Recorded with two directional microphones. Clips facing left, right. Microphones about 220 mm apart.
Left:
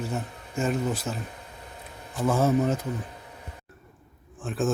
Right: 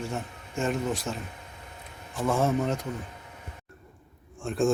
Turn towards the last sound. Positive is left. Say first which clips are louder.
# right 2 dB
turn(degrees=0)  # may be behind; listen again after turning